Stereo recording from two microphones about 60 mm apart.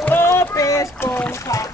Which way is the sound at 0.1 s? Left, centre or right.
Left.